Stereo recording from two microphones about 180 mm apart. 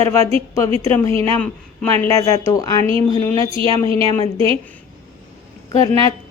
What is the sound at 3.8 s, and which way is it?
Speech, 30° right (ahead or behind).